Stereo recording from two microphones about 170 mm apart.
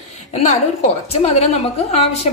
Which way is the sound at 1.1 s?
40° left (ahead or behind).